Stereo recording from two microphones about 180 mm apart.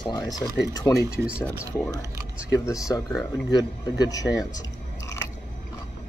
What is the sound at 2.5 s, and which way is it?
Speech, 20° left (ahead or behind).